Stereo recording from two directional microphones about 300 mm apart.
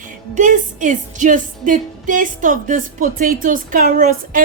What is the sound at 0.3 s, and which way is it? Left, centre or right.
Music, right.